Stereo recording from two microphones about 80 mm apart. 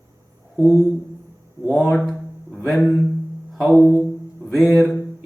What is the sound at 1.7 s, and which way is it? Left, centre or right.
Speech, centre.